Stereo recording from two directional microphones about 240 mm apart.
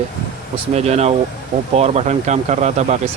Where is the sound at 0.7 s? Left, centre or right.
Right.